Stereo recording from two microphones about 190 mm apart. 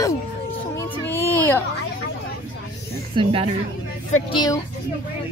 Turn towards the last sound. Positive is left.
turn(degrees=20)  # may be behind; listen again after turning